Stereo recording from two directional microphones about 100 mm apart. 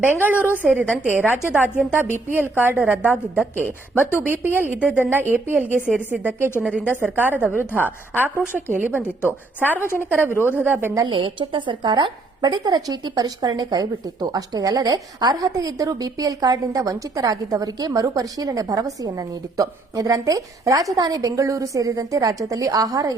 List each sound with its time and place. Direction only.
0.0 s a woman's voice: 20° right (ahead or behind)
0.3 s a woman's voice: 20° left (ahead or behind)
0.6 s a woman's voice: 15° right (ahead or behind)
3.7 s a woman's voice: 20° left (ahead or behind)
4.4 s a woman's voice: 25° right (ahead or behind)
7.5 s a woman's voice: 25° left (ahead or behind)
8.7 s a woman's voice: 15° right (ahead or behind)
9.8 s a woman's voice: 25° left (ahead or behind)
10.1 s a woman's voice: 20° right (ahead or behind)
11.0 s a woman's voice: 60° right (ahead or behind); by 23.1 s 40° right (ahead or behind)